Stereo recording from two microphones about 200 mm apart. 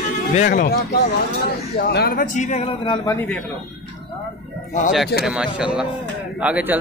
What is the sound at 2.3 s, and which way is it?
Speech, 35° left (ahead or behind).